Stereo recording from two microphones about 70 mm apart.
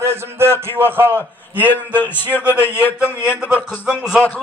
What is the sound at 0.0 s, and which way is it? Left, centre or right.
A man's voice, right.